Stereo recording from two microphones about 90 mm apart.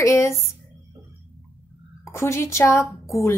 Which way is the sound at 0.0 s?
30° left (ahead or behind).